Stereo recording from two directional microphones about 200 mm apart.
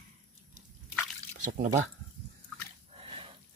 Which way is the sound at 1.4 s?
40° right (ahead or behind).